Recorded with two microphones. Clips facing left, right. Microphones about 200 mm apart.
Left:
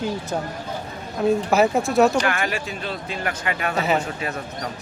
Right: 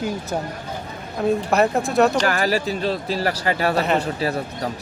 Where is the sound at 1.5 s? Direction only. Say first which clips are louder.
Even; centre (ahead or behind).